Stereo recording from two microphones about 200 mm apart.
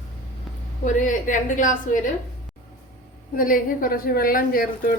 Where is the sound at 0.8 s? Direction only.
40° left (ahead or behind).